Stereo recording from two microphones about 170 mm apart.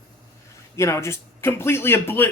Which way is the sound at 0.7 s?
15° left (ahead or behind).